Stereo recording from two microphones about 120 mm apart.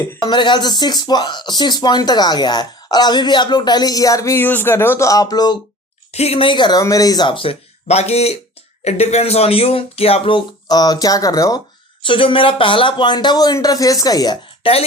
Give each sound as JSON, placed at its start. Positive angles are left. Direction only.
{"t": 0.2, "sound": "speech", "side_deg": 40}
{"t": 6.1, "sound": "speech", "side_deg": 55}
{"t": 7.9, "sound": "speech", "side_deg": 65}
{"t": 12.0, "sound": "speech", "side_deg": 45}
{"t": 14.6, "sound": "speech", "side_deg": 55}